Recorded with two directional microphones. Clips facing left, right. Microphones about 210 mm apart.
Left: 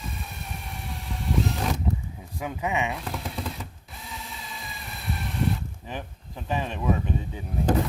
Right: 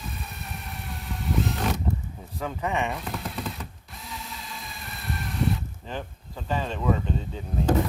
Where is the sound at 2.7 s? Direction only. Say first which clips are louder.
Even; centre (ahead or behind).